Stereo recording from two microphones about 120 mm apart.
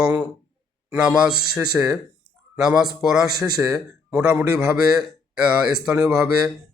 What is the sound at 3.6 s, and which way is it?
Speech, 25° right (ahead or behind).